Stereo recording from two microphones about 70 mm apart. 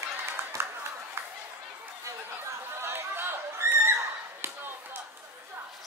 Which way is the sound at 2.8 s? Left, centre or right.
Right.